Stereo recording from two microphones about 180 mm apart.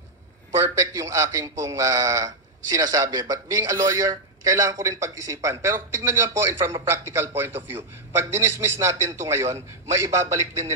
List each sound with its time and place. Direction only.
0.7 s a man's voice: 20° right (ahead or behind)